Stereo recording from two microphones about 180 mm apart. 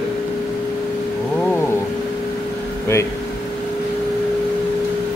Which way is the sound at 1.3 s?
10° left (ahead or behind).